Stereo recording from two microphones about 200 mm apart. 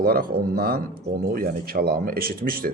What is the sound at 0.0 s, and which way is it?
Speech, 50° right (ahead or behind).